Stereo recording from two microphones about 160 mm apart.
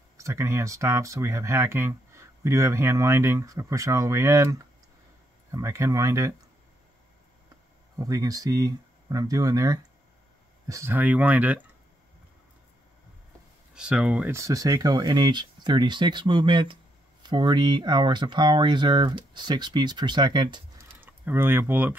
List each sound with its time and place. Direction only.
0.2 s speech: 15° right (ahead or behind)
8.0 s speech: 20° right (ahead or behind)
13.7 s speech: 5° right (ahead or behind); by 20.6 s 30° right (ahead or behind)
21.0 s speech: 15° right (ahead or behind)